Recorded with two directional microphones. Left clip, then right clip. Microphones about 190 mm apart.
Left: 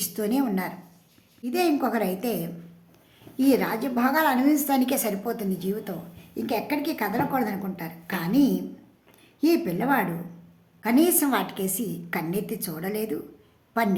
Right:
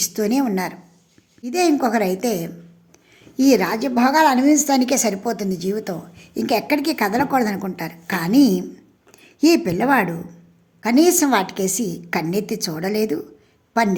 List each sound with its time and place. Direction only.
0.0 s a woman's voice: 30° right (ahead or behind)